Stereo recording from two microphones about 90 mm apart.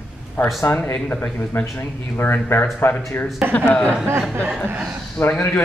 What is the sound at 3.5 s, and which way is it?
Speech, 15° left (ahead or behind).